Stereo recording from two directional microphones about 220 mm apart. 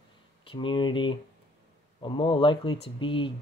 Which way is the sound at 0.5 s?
20° left (ahead or behind).